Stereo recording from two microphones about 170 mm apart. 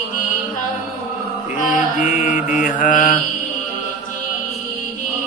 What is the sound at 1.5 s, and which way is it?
Mantra, 45° left (ahead or behind).